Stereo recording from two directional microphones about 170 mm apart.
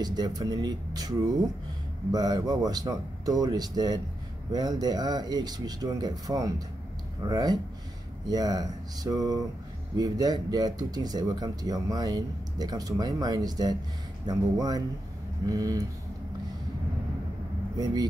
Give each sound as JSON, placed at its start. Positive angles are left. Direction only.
{"t": 0.0, "sound": "speech", "side_deg": -25}
{"t": 2.1, "sound": "speech", "side_deg": -20}
{"t": 17.7, "sound": "speech", "side_deg": -20}